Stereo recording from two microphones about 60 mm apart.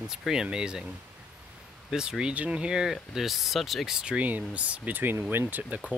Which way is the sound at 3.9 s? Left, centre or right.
Centre.